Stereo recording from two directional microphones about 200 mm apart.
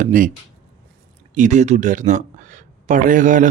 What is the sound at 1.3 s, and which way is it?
Speech, 40° right (ahead or behind).